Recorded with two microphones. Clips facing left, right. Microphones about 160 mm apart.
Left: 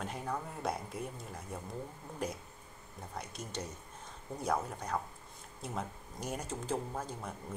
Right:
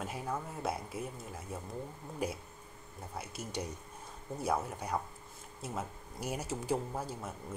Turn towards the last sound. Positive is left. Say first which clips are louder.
# right 1 dB
turn(degrees=-10)  # may be behind; listen again after turning